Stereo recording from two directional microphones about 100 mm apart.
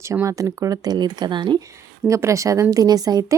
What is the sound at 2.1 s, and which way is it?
Speech, 30° right (ahead or behind).